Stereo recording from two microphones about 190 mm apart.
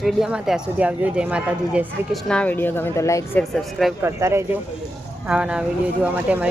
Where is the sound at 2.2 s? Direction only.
5° left (ahead or behind).